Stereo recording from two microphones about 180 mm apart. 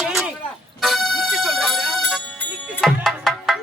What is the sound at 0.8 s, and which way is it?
Music, centre (ahead or behind).